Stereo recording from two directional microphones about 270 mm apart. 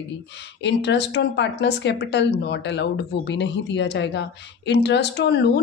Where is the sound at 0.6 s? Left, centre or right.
Left.